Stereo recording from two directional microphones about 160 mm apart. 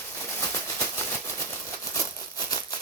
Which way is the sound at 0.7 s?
15° left (ahead or behind).